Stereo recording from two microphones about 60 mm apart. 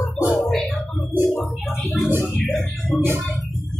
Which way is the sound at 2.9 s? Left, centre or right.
Right.